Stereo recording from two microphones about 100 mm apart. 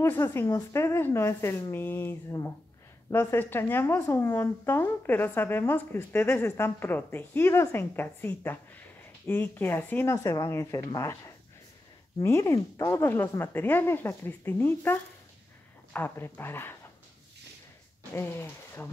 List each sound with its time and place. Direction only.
0.1 s a woman's voice: 25° left (ahead or behind)
10.1 s a woman's voice: 35° left (ahead or behind)
18.1 s speech: 25° left (ahead or behind)